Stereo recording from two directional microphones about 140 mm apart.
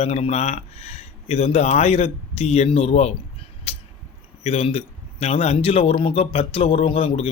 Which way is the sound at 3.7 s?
45° left (ahead or behind).